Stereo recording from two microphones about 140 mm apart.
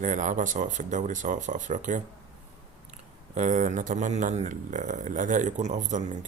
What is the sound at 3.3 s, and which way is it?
Speech, 65° right (ahead or behind).